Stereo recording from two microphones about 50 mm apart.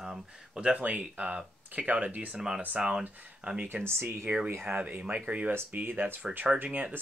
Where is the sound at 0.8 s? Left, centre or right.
Right.